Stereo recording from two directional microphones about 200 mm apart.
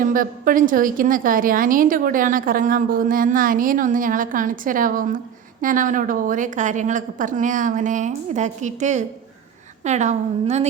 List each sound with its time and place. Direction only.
0.0 s a woman's voice: 45° right (ahead or behind)